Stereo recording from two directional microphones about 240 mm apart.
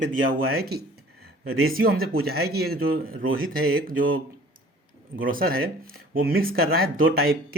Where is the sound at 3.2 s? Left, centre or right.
Right.